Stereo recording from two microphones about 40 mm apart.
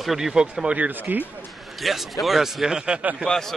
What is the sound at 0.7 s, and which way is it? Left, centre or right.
Speech, right.